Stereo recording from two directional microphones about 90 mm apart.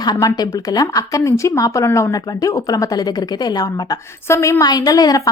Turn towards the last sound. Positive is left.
turn(degrees=45)  # may be behind; listen again after turning